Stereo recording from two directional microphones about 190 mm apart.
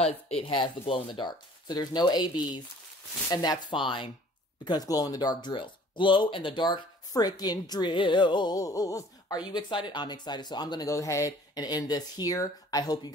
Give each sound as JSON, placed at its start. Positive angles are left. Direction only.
{"t": 0.0, "sound": "speech", "side_deg": 30}
{"t": 3.7, "sound": "speech", "side_deg": 25}